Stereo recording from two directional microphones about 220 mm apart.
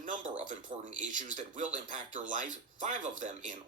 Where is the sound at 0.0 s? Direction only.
35° right (ahead or behind).